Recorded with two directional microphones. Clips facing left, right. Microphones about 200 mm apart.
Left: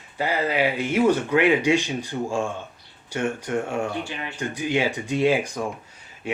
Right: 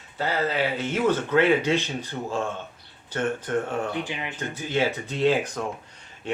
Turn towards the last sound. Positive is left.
turn(degrees=10)  # may be behind; listen again after turning